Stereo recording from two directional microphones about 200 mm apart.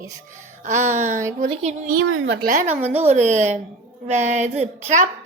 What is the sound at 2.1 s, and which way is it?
Speech, 75° right (ahead or behind).